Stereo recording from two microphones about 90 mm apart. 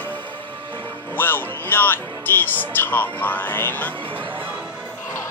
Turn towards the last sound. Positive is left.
turn(degrees=20)  # may be behind; listen again after turning